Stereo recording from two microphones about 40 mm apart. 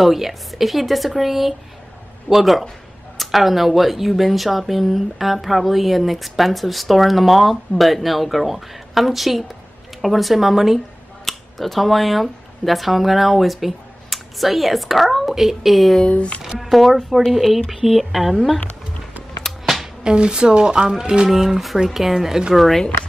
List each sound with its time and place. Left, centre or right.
0.0 s speech: centre
16.1 s speech: left
16.4 s speech: centre
19.6 s a sound: centre
20.0 s a woman's voice: right
22.5 s speech: centre